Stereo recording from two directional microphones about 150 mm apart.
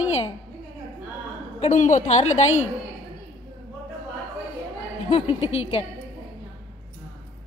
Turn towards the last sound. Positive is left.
turn(degrees=45)  # may be behind; listen again after turning